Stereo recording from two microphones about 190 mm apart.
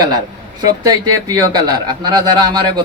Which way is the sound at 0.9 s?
20° right (ahead or behind).